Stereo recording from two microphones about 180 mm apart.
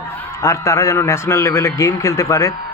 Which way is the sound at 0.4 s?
15° left (ahead or behind).